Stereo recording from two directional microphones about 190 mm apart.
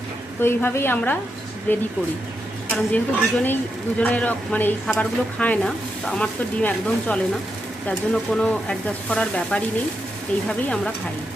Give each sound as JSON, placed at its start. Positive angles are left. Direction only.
{"t": 0.4, "sound": "speech", "side_deg": 10}